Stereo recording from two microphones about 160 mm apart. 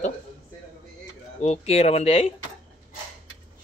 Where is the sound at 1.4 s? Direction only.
40° left (ahead or behind).